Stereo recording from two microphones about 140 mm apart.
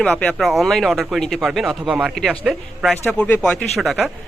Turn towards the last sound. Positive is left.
turn(degrees=0)  # may be behind; listen again after turning